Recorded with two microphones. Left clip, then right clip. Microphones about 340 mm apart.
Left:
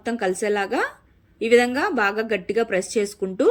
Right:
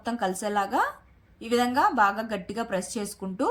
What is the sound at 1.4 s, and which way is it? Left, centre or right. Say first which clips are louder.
Speech: left 5 dB; right.